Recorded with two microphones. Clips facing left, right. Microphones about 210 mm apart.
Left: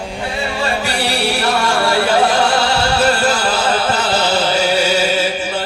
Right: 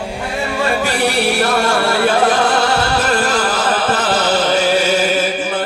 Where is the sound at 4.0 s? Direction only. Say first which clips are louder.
Right 1 dB; 50° right (ahead or behind).